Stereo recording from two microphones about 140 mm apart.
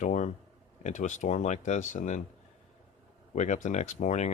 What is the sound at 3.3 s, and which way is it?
Speech, 60° left (ahead or behind).